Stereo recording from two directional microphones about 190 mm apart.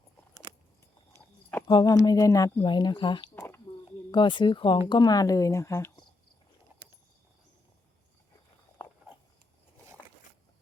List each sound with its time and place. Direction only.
0.5 s keys jangling: 25° right (ahead or behind)
1.1 s a sound: 10° left (ahead or behind)
1.6 s speech: 20° left (ahead or behind)